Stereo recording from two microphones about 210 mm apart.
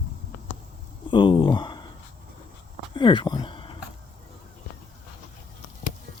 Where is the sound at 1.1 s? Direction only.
20° left (ahead or behind).